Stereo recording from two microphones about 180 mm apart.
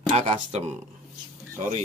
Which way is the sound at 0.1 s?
40° right (ahead or behind).